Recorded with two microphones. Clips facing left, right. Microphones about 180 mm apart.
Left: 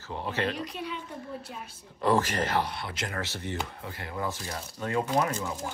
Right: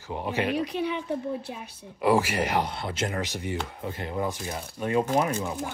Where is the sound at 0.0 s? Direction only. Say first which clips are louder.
Right 3 dB; 15° right (ahead or behind).